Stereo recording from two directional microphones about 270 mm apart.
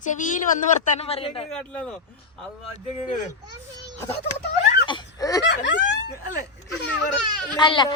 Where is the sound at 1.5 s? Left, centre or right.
Centre.